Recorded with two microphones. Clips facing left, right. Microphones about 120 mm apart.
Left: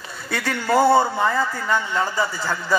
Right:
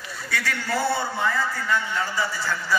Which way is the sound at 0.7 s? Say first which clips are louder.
Left 10 dB; 50° left (ahead or behind).